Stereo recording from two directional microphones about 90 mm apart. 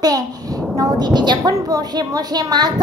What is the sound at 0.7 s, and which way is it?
A child's voice, 45° right (ahead or behind).